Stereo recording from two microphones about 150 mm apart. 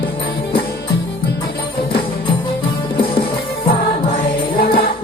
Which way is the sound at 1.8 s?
35° left (ahead or behind).